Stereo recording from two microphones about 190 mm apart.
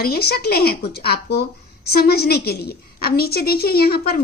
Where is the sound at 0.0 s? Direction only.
55° left (ahead or behind).